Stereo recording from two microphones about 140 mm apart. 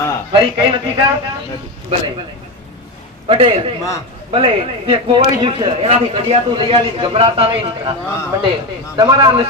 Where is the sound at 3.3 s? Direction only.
40° right (ahead or behind).